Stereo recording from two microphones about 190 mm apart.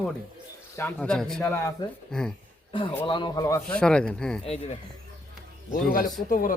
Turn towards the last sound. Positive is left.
turn(degrees=45)  # may be behind; listen again after turning